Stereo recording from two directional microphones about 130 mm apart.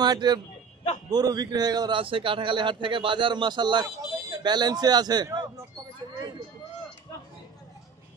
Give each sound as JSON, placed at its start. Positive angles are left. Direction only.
{"t": 0.0, "sound": "a man's voice", "side_deg": -30}
{"t": 2.0, "sound": "a man's voice", "side_deg": -45}